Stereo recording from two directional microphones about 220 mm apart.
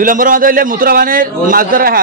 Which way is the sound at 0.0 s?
40° right (ahead or behind).